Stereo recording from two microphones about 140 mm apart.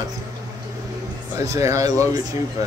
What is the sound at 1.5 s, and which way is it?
Speech, 20° right (ahead or behind).